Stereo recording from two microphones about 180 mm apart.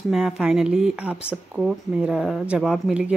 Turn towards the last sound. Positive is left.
turn(degrees=-5)  # may be behind; listen again after turning